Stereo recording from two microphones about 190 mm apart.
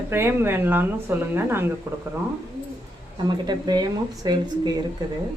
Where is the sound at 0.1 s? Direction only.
10° right (ahead or behind).